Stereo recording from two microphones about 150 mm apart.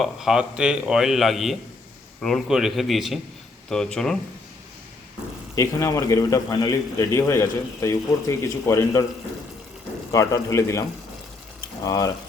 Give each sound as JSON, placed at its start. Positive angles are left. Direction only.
{"t": 0.0, "sound": "a man's voice", "side_deg": -5}
{"t": 5.5, "sound": "a man's voice", "side_deg": 20}
{"t": 10.1, "sound": "a man's voice", "side_deg": 20}
{"t": 11.9, "sound": "a man's voice", "side_deg": 25}